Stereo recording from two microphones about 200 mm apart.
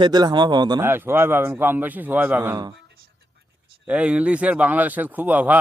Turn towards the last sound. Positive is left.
turn(degrees=-10)  # may be behind; listen again after turning